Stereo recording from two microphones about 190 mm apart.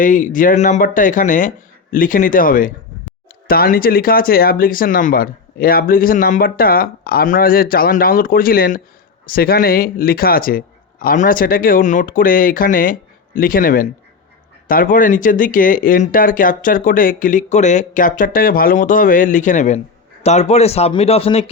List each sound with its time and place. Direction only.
0.0 s speech: 45° left (ahead or behind)